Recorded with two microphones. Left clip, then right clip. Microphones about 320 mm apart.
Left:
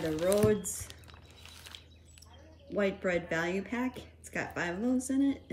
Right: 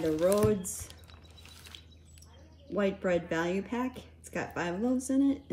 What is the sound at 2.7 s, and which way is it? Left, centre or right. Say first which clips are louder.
Speech: right 1 dB; centre.